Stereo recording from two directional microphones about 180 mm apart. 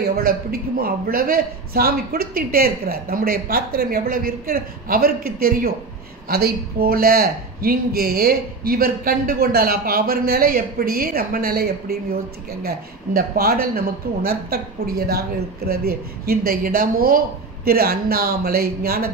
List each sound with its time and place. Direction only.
0.1 s speech: 55° right (ahead or behind)